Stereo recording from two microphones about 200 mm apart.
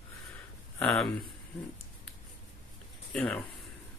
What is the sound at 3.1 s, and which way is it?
Speech, 5° left (ahead or behind).